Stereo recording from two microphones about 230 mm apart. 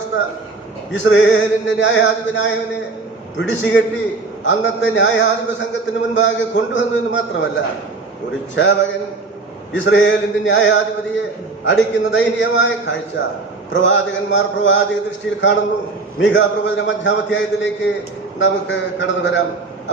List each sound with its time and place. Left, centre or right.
0.9 s a man's voice: left
16.2 s a man's voice: left